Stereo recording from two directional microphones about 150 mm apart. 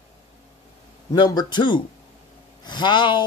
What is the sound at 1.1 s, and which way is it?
Speech, 30° left (ahead or behind).